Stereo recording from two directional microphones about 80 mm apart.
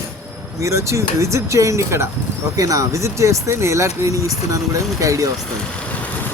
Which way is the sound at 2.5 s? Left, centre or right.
Right.